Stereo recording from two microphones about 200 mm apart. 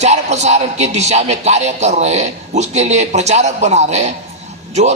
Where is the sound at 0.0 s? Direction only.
35° right (ahead or behind).